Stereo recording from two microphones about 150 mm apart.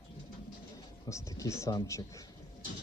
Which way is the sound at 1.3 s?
20° left (ahead or behind).